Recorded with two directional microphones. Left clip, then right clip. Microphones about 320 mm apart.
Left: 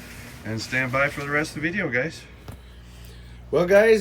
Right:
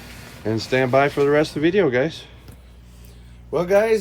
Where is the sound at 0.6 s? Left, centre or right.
Centre.